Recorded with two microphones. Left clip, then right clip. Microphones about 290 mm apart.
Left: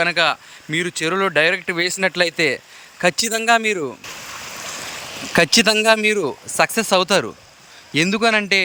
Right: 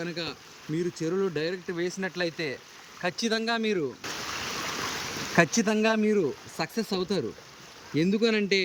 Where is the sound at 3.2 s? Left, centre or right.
Centre.